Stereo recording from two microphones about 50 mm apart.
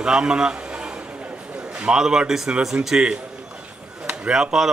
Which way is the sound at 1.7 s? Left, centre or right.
Centre.